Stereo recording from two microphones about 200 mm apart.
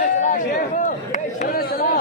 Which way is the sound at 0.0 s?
40° left (ahead or behind).